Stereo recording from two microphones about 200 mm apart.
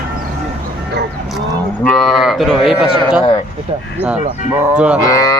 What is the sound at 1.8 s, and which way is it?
Speech, centre (ahead or behind).